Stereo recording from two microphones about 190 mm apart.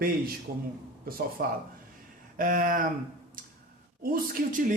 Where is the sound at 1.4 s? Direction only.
55° right (ahead or behind).